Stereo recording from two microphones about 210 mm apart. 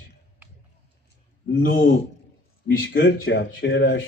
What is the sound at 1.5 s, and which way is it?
Speech, 60° left (ahead or behind).